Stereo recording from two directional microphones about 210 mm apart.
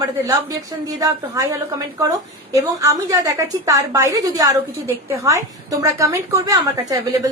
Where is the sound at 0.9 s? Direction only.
15° right (ahead or behind).